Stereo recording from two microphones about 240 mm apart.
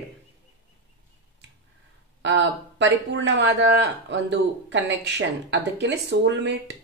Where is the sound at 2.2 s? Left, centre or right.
Right.